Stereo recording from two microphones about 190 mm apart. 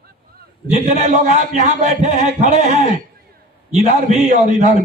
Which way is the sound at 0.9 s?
40° right (ahead or behind).